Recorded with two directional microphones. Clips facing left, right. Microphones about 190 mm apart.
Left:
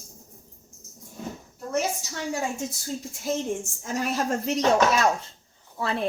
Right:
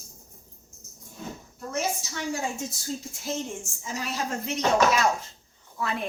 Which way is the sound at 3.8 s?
50° left (ahead or behind).